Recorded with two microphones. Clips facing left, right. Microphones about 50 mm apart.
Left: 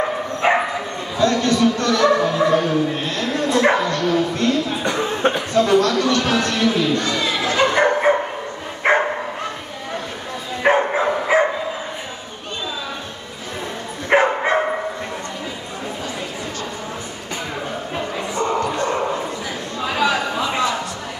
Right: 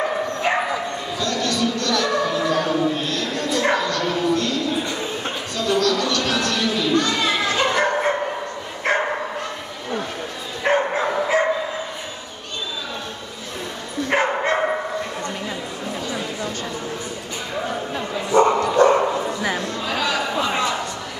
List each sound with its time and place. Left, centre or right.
0.4 s dog: left
1.1 s speech: left
4.8 s a sound: left
5.5 s speech: left
7.4 s bow-wow: left
10.6 s dog: centre
14.0 s bow-wow: centre
18.4 s dog: right
19.8 s chatter: centre
20.3 s a sound: centre